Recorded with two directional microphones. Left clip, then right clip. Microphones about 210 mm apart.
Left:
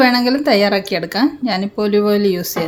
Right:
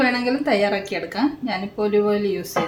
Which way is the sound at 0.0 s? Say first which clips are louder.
Left 7 dB; 50° left (ahead or behind).